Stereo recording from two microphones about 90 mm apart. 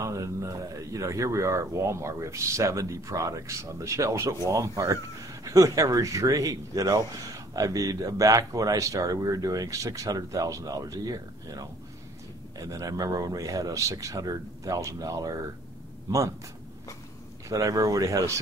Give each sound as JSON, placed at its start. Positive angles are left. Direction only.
{"t": 0.0, "sound": "speech", "side_deg": -35}
{"t": 17.5, "sound": "speech", "side_deg": -40}